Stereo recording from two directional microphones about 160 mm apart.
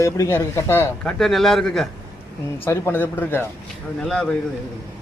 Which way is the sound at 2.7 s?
15° left (ahead or behind).